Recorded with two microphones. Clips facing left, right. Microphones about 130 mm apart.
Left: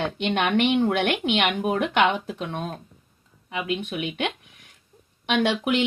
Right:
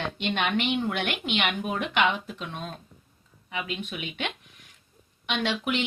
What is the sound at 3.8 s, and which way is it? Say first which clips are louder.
Speech: left 6 dB; 55° left (ahead or behind).